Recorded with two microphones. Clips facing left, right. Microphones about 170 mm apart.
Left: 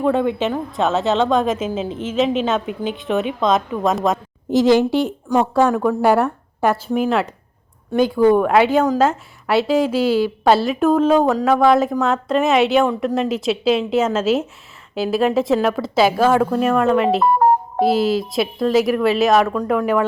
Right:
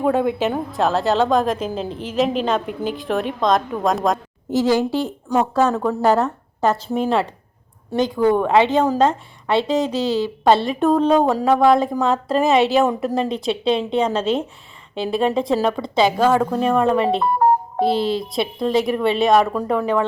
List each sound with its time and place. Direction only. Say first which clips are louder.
0.0 s speech: left 1 dB; 5° right (ahead or behind)
4.5 s a woman's voice: left 4 dB; 20° left (ahead or behind)
6.8 s a woman's voice: left 2 dB; 30° right (ahead or behind)
8.1 s speech: left 2 dB; 10° left (ahead or behind)
9.9 s a woman's voice: left 3 dB; 20° right (ahead or behind)
10.2 s speech: left 1 dB; 5° left (ahead or behind)